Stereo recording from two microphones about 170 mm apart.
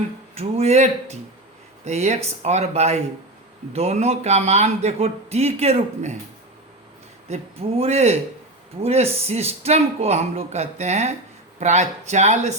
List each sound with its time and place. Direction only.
0.3 s speech: 40° right (ahead or behind)
7.3 s speech: 40° right (ahead or behind)